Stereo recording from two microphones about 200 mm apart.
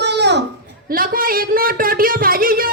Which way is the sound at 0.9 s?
45° right (ahead or behind).